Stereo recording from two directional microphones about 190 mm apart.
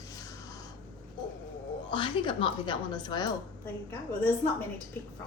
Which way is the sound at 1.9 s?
25° left (ahead or behind).